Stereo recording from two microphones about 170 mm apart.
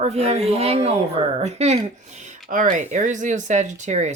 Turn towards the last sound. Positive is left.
turn(degrees=-45)  # may be behind; listen again after turning